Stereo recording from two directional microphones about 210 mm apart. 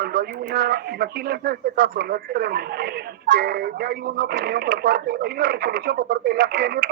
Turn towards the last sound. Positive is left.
turn(degrees=-50)  # may be behind; listen again after turning